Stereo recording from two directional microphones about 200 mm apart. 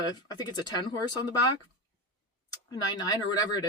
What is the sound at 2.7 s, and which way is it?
Speech, 20° left (ahead or behind).